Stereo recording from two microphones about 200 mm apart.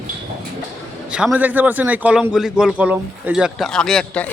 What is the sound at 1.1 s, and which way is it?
A man's voice, 5° right (ahead or behind).